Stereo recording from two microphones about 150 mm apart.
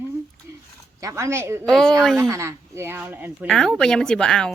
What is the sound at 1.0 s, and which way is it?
Speech, 20° right (ahead or behind).